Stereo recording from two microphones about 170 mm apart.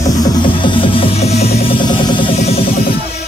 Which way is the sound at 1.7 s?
25° left (ahead or behind).